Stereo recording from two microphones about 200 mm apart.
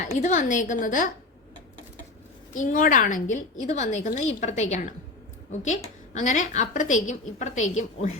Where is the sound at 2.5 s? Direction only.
40° left (ahead or behind).